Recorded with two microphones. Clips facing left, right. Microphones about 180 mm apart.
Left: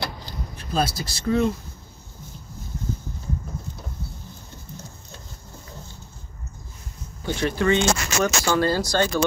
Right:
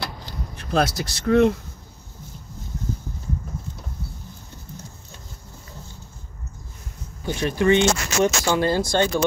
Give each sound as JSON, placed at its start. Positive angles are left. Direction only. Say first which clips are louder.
{"t": 0.7, "sound": "speech", "louder": "right 3 dB", "side_deg": -75}
{"t": 7.2, "sound": "speech", "louder": "right 2 dB", "side_deg": -15}